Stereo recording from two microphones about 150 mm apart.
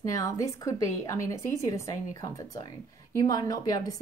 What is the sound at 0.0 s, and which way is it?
A woman's voice, 20° left (ahead or behind).